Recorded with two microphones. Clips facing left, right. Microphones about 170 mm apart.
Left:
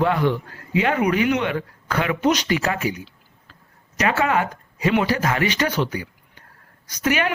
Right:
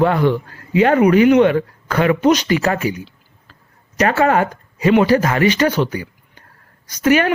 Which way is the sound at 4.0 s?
45° right (ahead or behind).